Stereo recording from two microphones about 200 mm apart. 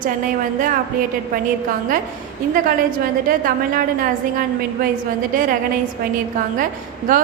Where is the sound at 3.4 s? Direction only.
45° right (ahead or behind).